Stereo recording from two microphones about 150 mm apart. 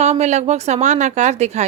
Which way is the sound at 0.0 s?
50° right (ahead or behind).